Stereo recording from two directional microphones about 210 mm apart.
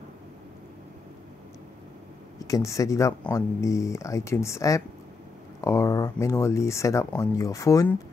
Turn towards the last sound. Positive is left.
turn(degrees=15)  # may be behind; listen again after turning